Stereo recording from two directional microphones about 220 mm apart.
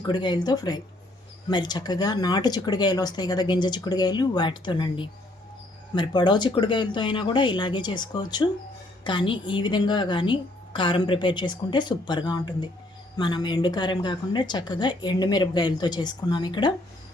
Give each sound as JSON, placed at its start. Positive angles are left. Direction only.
{"t": 0.0, "sound": "speech", "side_deg": 20}